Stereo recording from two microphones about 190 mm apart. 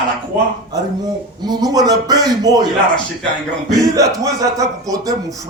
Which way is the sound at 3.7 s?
20° right (ahead or behind).